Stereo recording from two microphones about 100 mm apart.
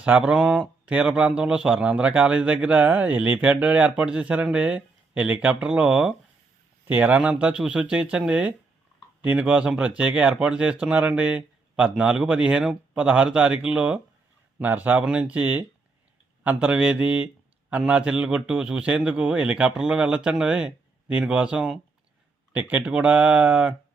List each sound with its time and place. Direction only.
0.0 s a man's voice: 10° right (ahead or behind)